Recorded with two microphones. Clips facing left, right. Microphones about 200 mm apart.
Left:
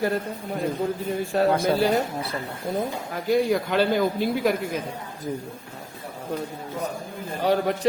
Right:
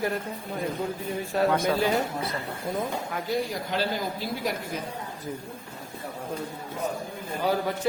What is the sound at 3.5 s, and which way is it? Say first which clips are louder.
Speech: left 7 dB; 60° left (ahead or behind).